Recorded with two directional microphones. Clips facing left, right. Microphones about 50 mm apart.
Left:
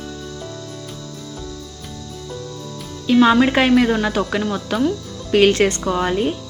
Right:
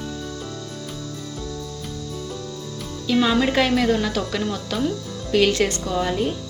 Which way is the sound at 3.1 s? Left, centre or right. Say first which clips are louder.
Left 6 dB; left.